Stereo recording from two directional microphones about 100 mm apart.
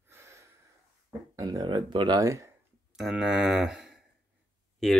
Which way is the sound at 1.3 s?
40° right (ahead or behind).